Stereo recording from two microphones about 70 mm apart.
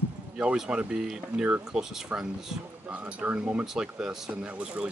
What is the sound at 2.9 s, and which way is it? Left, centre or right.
Speech, centre.